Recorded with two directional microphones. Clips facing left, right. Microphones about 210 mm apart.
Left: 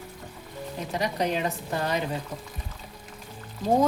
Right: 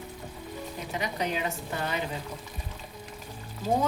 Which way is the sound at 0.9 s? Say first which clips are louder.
Left 4 dB; 40° left (ahead or behind).